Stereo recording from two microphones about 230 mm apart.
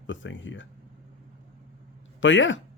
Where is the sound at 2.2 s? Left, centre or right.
Left.